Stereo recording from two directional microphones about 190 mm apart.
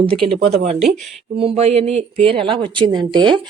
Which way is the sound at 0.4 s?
35° right (ahead or behind).